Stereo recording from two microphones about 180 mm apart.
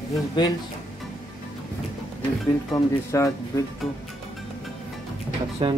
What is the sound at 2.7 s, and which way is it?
Speech, 15° left (ahead or behind).